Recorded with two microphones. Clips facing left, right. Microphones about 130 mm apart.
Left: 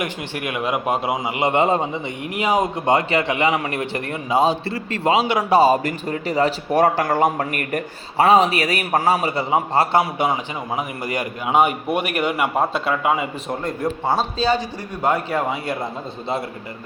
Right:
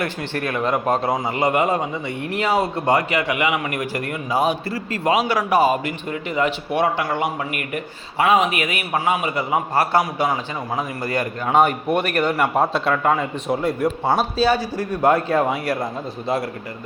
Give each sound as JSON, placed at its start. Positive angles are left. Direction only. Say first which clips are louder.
{"t": 0.0, "sound": "a man's voice", "louder": "right 2 dB", "side_deg": 15}
{"t": 8.2, "sound": "a man's voice", "louder": "left 3 dB", "side_deg": 35}
{"t": 13.5, "sound": "a man's voice", "louder": "right 5 dB", "side_deg": -5}
{"t": 14.8, "sound": "a man's voice", "louder": "right 4 dB", "side_deg": 15}